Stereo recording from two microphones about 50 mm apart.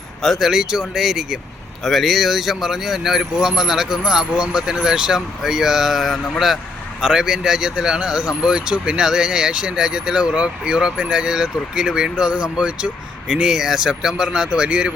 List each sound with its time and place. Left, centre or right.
0.3 s speech: centre
1.8 s speech: centre